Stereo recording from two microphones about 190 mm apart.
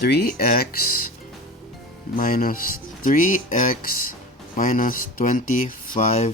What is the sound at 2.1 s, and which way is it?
Speech, 50° left (ahead or behind).